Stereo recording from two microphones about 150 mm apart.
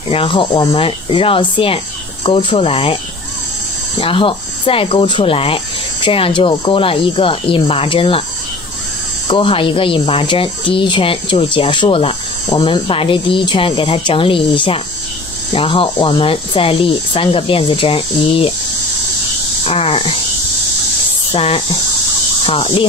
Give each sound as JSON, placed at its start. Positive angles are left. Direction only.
{"t": 0.1, "sound": "speech", "side_deg": 35}
{"t": 4.0, "sound": "speech", "side_deg": 35}
{"t": 9.3, "sound": "speech", "side_deg": 35}
{"t": 19.6, "sound": "speech", "side_deg": 40}
{"t": 21.3, "sound": "speech", "side_deg": 40}